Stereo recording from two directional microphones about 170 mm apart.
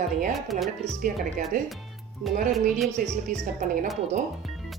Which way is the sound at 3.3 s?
50° right (ahead or behind).